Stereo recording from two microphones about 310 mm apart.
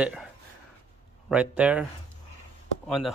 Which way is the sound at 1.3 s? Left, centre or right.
Centre.